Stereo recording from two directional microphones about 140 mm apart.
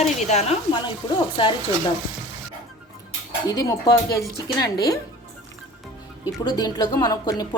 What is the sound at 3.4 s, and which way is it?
Speech, 25° left (ahead or behind).